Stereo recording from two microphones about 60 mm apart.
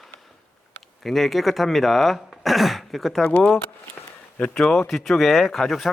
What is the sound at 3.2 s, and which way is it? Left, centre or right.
Speech, left.